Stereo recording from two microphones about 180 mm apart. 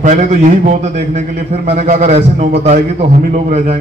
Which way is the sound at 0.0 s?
40° right (ahead or behind).